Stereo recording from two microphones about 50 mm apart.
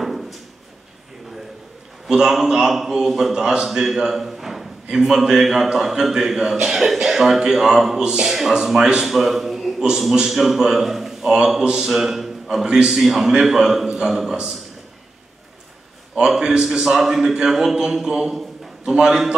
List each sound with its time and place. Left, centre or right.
0.0 s a sound: centre
2.0 s a man's voice: centre
3.6 s a sound: centre
5.2 s a man's voice: centre
12.6 s a man's voice: centre
12.9 s a man's voice: centre
16.2 s a man's voice: centre